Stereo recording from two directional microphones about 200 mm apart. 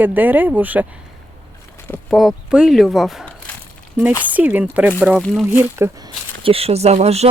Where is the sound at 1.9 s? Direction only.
Centre (ahead or behind).